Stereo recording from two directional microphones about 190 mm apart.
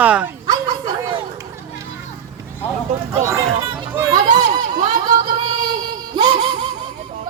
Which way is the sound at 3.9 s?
20° right (ahead or behind).